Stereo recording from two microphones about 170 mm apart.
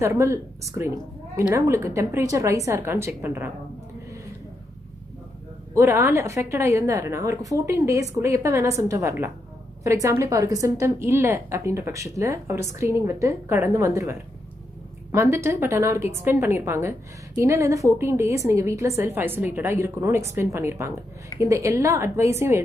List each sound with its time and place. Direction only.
0.0 s a woman's voice: 15° right (ahead or behind)
5.8 s a woman's voice: 15° right (ahead or behind)